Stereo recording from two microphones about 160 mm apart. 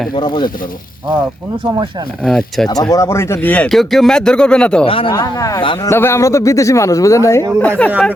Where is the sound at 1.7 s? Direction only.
30° right (ahead or behind).